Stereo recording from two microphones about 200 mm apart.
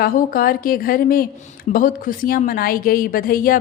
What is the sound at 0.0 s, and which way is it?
A woman's voice, 45° left (ahead or behind).